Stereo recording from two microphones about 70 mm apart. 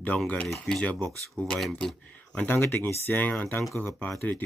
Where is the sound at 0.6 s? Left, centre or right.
Centre.